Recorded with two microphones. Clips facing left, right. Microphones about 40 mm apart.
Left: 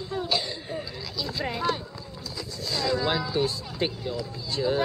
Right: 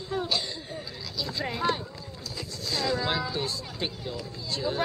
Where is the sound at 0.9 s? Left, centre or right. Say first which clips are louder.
Left 1 dB; centre.